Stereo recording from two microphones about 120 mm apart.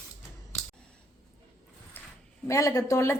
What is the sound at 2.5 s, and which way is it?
Speech, 25° left (ahead or behind).